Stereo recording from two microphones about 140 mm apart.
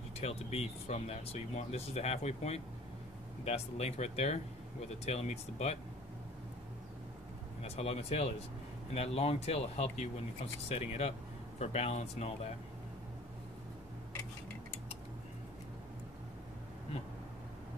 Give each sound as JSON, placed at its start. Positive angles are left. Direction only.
{"t": 0.2, "sound": "speech", "side_deg": 50}
{"t": 7.6, "sound": "speech", "side_deg": 45}